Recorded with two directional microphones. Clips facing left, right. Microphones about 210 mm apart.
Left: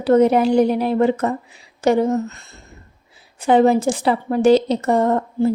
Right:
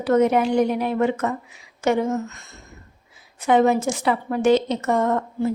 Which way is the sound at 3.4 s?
30° left (ahead or behind).